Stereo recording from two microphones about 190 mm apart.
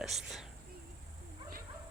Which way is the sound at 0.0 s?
Centre (ahead or behind).